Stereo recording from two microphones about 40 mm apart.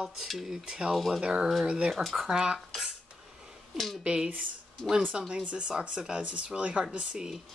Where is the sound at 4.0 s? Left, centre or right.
Right.